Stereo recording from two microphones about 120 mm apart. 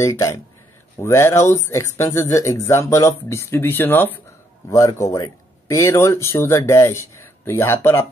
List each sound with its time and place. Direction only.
0.0 s speech: 25° left (ahead or behind)